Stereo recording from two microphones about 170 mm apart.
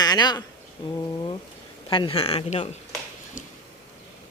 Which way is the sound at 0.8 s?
25° left (ahead or behind).